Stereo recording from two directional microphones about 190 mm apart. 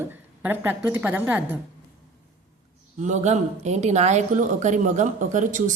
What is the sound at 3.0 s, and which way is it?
A woman's voice, 40° right (ahead or behind).